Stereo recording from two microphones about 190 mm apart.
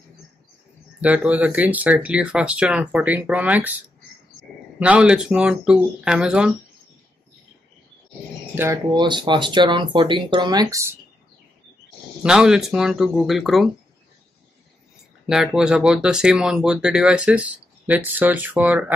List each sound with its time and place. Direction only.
1.0 s speech: 5° right (ahead or behind)
8.5 s speech: 10° right (ahead or behind)
8.9 s speech: 25° right (ahead or behind)
12.2 s speech: 5° right (ahead or behind)
15.2 s speech: 5° right (ahead or behind)